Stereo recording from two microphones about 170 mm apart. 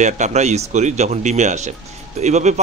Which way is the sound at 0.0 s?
45° right (ahead or behind).